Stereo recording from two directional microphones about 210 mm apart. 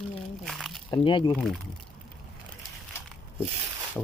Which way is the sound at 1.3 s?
5° left (ahead or behind).